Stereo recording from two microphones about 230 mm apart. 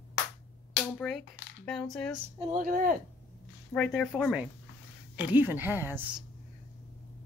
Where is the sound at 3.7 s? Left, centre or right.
Centre.